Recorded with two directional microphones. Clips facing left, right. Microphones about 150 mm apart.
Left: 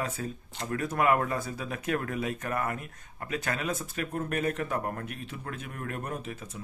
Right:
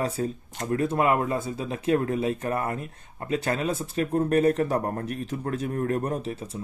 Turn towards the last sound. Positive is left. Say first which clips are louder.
# right 7 dB
turn(degrees=-30)  # may be behind; listen again after turning